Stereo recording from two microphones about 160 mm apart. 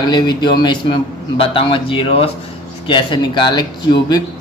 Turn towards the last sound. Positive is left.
turn(degrees=25)  # may be behind; listen again after turning